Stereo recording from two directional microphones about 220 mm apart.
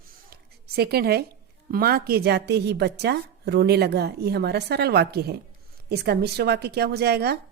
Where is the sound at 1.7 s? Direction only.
45° right (ahead or behind).